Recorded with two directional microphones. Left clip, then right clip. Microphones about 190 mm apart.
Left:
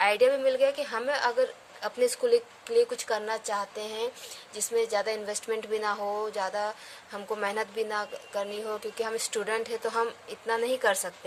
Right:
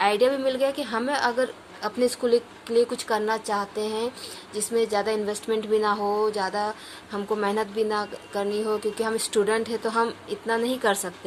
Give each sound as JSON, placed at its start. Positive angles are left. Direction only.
{"t": 0.0, "sound": "speech", "side_deg": 30}